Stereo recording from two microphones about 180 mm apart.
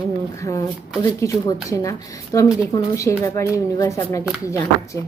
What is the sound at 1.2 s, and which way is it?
Speech, 20° left (ahead or behind).